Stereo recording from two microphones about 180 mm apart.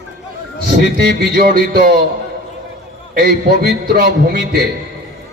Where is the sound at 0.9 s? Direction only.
60° right (ahead or behind).